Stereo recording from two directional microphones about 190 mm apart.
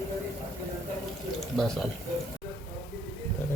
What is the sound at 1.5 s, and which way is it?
Speech, centre (ahead or behind).